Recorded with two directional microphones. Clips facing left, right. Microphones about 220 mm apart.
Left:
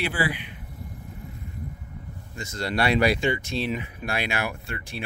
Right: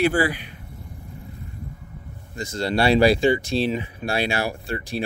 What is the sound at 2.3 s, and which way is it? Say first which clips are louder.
Speech: right 4 dB; 30° right (ahead or behind).